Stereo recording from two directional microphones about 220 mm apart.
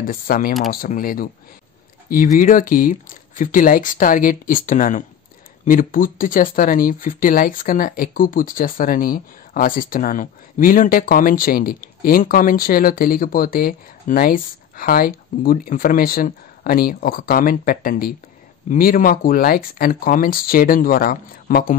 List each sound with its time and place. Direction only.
0.0 s speech: 40° left (ahead or behind)